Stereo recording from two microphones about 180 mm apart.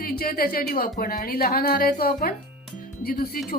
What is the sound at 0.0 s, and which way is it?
A woman's voice, 55° left (ahead or behind).